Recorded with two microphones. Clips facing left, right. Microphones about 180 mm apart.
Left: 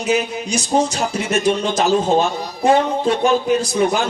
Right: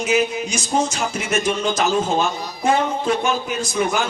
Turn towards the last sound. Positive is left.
turn(degrees=35)  # may be behind; listen again after turning